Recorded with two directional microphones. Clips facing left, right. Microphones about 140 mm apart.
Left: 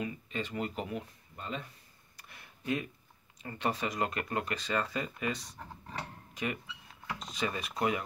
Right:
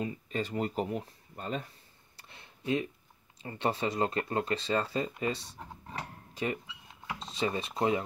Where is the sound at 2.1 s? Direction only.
25° right (ahead or behind).